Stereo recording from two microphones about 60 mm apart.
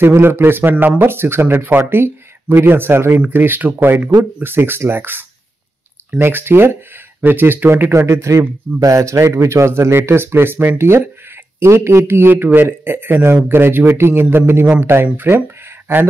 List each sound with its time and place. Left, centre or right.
0.0 s a man's voice: right
1.1 s a man's voice: right
8.1 s a man's voice: right